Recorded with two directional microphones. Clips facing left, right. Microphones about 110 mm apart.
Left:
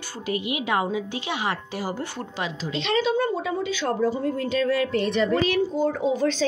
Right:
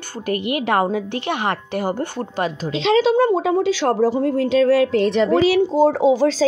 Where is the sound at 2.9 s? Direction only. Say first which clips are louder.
Right 8 dB; 90° right.